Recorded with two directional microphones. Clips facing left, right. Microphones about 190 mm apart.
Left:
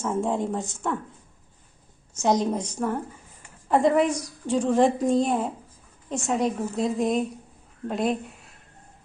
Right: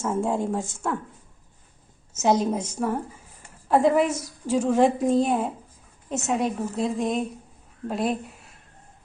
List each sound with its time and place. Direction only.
0.0 s a woman's voice: 5° right (ahead or behind)
2.1 s a woman's voice: 5° right (ahead or behind)